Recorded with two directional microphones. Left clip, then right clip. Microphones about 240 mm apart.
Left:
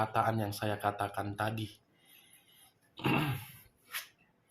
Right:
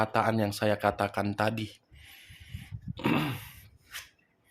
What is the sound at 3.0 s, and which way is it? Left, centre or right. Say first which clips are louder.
Speech: right 3 dB; right.